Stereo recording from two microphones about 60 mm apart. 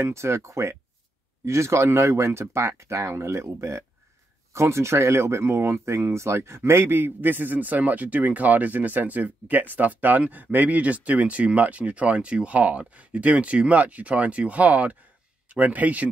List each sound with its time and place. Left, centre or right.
0.0 s speech: right